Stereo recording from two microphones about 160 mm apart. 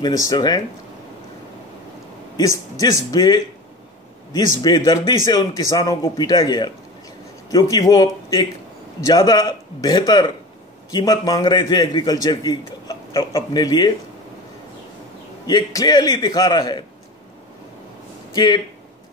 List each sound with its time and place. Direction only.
0.0 s a man's voice: 20° left (ahead or behind)
2.8 s a man's voice: 20° left (ahead or behind)
15.4 s a man's voice: 25° left (ahead or behind)
18.3 s speech: 25° left (ahead or behind)